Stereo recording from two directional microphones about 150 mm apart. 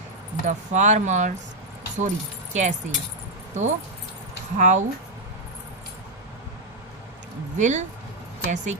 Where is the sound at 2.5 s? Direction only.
50° right (ahead or behind).